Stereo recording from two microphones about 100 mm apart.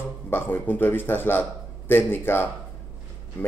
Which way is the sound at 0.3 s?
20° left (ahead or behind).